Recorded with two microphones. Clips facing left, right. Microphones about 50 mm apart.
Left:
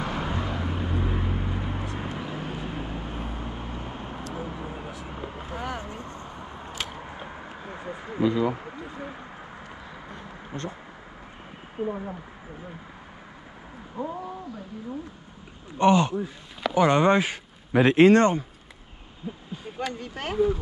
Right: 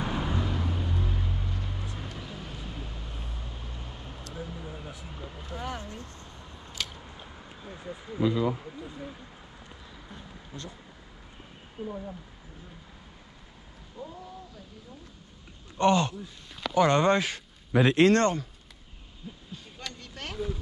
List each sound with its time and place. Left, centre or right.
0.0 s vehicle: left
0.3 s vehicle: left
8.3 s a sound: left
11.8 s speech: left
13.9 s speech: left
15.8 s speech: left